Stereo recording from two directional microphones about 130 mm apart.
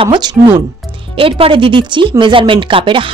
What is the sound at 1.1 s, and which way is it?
Speech, 45° right (ahead or behind).